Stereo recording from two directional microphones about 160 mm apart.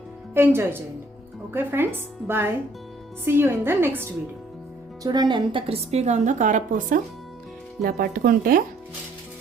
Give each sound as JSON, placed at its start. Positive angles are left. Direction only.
{"t": 0.3, "sound": "a woman's voice", "side_deg": -15}
{"t": 5.0, "sound": "a woman's voice", "side_deg": -25}
{"t": 7.8, "sound": "speech", "side_deg": -70}